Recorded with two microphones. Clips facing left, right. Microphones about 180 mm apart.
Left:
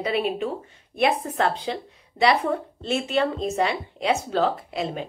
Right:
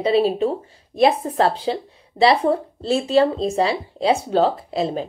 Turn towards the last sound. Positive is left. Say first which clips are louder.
# right 6 dB
turn(degrees=-35)  # may be behind; listen again after turning